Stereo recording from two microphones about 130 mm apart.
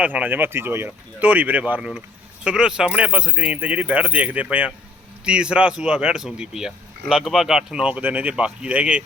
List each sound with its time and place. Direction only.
0.0 s speech: 10° right (ahead or behind)